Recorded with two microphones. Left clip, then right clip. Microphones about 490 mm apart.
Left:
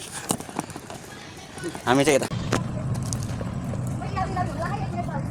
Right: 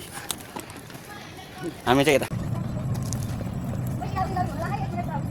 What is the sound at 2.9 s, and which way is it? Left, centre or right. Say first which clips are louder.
Vehicle: left 1 dB; right.